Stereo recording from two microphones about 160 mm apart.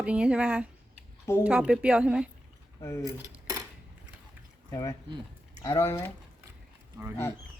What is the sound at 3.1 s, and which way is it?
Dishes, 15° right (ahead or behind).